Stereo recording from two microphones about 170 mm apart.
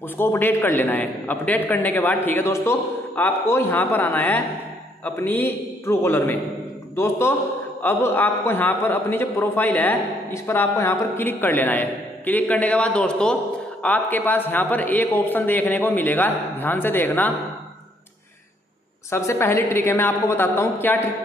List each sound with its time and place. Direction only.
0.2 s a man's voice: 10° left (ahead or behind)
19.0 s a man's voice: 15° left (ahead or behind)